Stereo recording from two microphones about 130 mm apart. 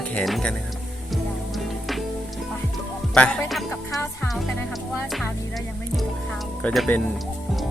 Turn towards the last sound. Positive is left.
turn(degrees=10)  # may be behind; listen again after turning